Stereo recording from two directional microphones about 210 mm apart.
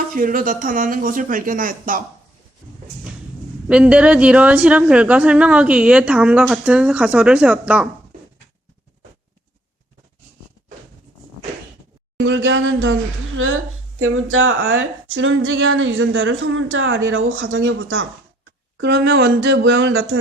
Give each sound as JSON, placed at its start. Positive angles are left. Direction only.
{"t": 0.2, "sound": "speech", "side_deg": -40}
{"t": 3.7, "sound": "a woman's voice", "side_deg": -5}
{"t": 12.2, "sound": "a woman's voice", "side_deg": -60}
{"t": 18.8, "sound": "a woman's voice", "side_deg": -55}